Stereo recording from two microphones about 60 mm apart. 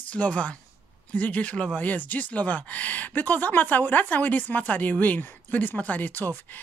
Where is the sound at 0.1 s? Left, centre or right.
Left.